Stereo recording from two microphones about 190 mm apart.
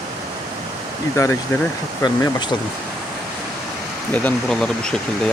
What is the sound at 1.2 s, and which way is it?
Speech, 15° left (ahead or behind).